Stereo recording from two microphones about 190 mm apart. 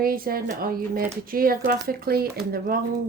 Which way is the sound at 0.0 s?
50° right (ahead or behind).